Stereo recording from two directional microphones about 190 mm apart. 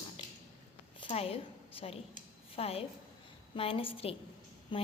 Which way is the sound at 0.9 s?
30° left (ahead or behind).